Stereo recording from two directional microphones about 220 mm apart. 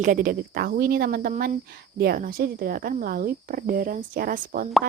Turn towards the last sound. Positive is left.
turn(degrees=-40)  # may be behind; listen again after turning